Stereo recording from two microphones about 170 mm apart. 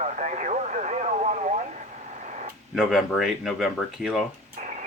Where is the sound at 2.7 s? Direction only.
Centre (ahead or behind).